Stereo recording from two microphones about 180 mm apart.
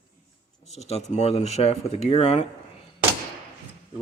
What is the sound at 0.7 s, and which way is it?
Speech, 35° left (ahead or behind).